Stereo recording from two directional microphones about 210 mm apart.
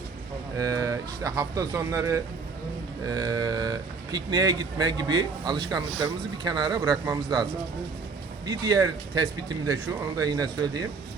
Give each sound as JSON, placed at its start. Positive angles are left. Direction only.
{"t": 0.6, "sound": "speech", "side_deg": -15}
{"t": 8.4, "sound": "speech", "side_deg": -15}